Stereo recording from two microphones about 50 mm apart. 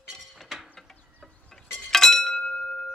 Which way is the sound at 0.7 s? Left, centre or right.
Centre.